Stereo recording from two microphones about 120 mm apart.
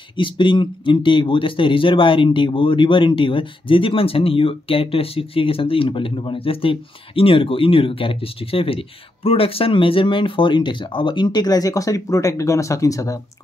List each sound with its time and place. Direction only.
0.1 s speech: 45° left (ahead or behind)